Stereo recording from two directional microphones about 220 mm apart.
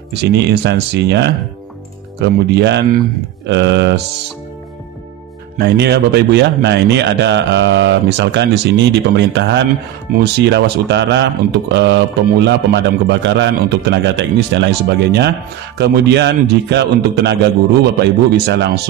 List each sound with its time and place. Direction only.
0.1 s speech: 50° right (ahead or behind)
5.6 s speech: 50° right (ahead or behind)